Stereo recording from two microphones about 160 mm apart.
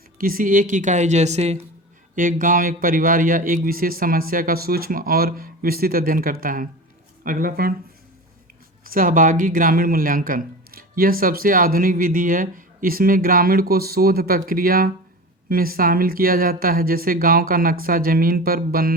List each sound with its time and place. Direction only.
0.2 s speech: 60° right (ahead or behind); by 1.6 s 40° right (ahead or behind)
2.1 s speech: 55° right (ahead or behind)
8.8 s speech: 60° right (ahead or behind)